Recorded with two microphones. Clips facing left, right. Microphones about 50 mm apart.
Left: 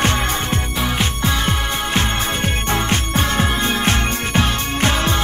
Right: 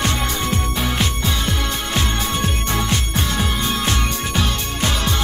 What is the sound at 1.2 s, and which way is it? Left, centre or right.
Music, left.